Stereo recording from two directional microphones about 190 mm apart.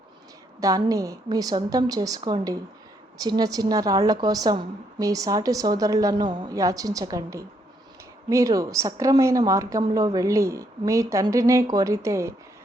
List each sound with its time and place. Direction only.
0.6 s a woman's voice: 20° right (ahead or behind)